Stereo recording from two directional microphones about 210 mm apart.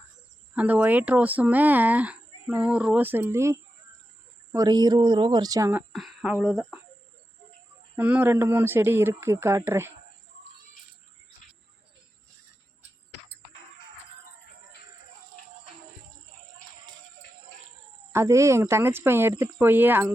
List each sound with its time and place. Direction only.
0.5 s a woman's voice: 5° right (ahead or behind)
5.9 s speech: centre (ahead or behind)
7.9 s speech: 5° right (ahead or behind)
18.1 s speech: 15° right (ahead or behind)